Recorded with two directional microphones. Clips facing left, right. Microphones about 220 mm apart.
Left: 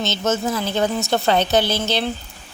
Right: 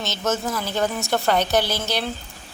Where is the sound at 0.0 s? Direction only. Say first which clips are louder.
Left 3 dB; 25° left (ahead or behind).